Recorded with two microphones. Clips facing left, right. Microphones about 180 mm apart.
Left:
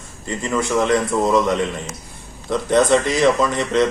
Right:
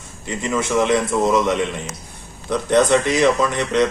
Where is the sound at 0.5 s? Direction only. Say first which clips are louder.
Even; centre (ahead or behind).